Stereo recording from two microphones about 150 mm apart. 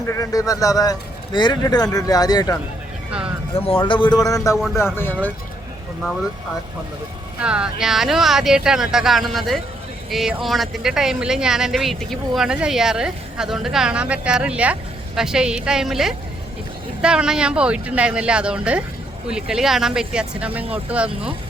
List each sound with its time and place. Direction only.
0.1 s a man's voice: 20° left (ahead or behind)
3.1 s speech: 10° right (ahead or behind)
3.8 s a man's voice: 35° left (ahead or behind)
4.5 s speech: 5° right (ahead or behind)
4.9 s speech: 15° left (ahead or behind)
7.4 s speech: 5° right (ahead or behind)